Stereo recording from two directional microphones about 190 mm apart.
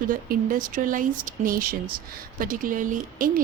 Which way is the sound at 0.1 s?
45° right (ahead or behind).